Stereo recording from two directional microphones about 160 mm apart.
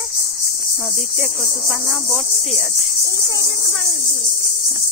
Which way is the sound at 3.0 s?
20° right (ahead or behind).